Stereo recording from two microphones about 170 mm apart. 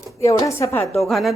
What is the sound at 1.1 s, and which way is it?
Cutlery, centre (ahead or behind).